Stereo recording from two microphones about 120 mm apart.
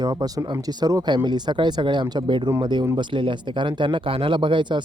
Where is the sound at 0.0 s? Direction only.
35° right (ahead or behind).